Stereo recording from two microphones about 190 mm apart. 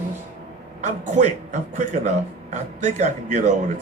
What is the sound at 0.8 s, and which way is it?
A man's voice, 40° right (ahead or behind).